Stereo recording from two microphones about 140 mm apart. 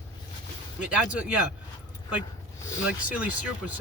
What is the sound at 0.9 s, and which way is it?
Speech, 10° right (ahead or behind).